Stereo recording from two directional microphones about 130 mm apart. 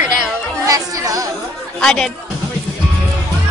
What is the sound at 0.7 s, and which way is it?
Speech, 25° right (ahead or behind).